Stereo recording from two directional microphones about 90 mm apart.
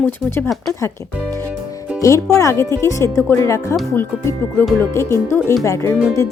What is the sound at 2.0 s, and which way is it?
Speech, 35° left (ahead or behind).